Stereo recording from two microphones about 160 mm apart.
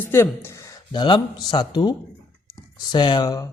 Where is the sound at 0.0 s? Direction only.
15° left (ahead or behind).